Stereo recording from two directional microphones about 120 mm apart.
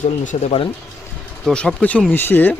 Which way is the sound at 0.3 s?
65° left (ahead or behind).